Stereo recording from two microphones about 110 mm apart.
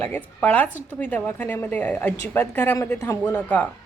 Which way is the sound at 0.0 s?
15° left (ahead or behind).